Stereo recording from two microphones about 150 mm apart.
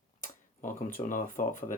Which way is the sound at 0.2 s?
60° left (ahead or behind).